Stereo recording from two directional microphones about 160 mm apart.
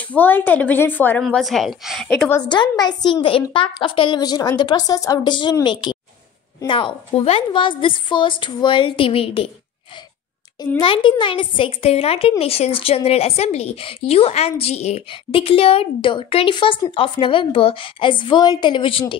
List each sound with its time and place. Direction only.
0.1 s speech: 10° left (ahead or behind)
1.2 s a woman's voice: centre (ahead or behind)
2.4 s a woman's voice: 30° left (ahead or behind)
10.8 s speech: 30° left (ahead or behind)